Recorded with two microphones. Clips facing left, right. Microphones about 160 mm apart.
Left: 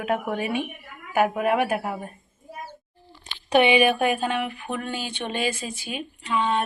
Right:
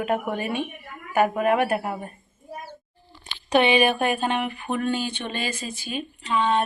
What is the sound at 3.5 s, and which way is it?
Speech, 10° left (ahead or behind).